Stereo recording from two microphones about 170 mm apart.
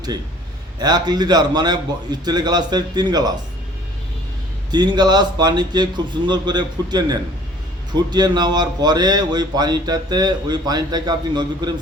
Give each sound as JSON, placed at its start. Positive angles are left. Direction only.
{"t": 0.8, "sound": "a man's voice", "side_deg": -25}
{"t": 4.7, "sound": "a man's voice", "side_deg": -25}